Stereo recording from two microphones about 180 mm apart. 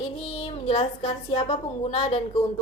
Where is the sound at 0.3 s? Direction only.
30° left (ahead or behind).